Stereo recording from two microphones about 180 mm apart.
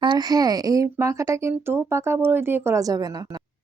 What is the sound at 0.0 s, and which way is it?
Speech, 25° right (ahead or behind).